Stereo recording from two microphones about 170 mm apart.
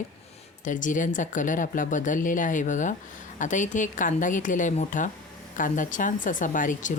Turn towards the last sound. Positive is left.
turn(degrees=50)  # may be behind; listen again after turning